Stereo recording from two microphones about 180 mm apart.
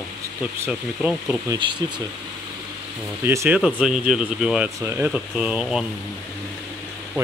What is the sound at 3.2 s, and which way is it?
Speech, 15° right (ahead or behind).